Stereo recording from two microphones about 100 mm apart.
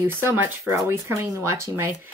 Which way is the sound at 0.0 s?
25° right (ahead or behind).